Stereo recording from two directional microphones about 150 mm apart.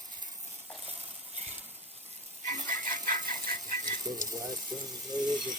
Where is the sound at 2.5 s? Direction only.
55° right (ahead or behind).